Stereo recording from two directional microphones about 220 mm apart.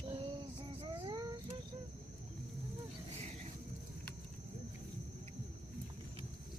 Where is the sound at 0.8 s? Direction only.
25° right (ahead or behind).